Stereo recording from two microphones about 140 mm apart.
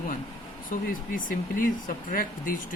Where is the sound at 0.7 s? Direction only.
80° left.